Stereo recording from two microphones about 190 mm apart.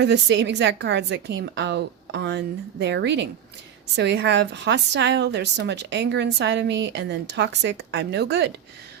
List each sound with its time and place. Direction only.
0.0 s a woman's voice: 65° right (ahead or behind)